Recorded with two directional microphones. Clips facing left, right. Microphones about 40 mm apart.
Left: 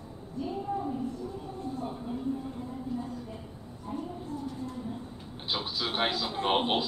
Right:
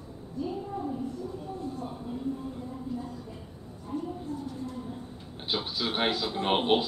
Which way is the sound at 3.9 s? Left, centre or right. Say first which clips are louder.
Right 2 dB; centre.